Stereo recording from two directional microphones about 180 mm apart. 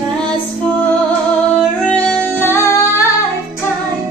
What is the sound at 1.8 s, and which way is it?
Music, 10° left (ahead or behind).